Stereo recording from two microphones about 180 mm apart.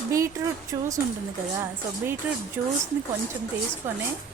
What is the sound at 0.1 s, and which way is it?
Speech, 20° right (ahead or behind).